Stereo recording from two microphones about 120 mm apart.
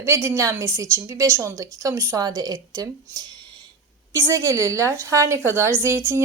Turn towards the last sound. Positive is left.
turn(degrees=-20)  # may be behind; listen again after turning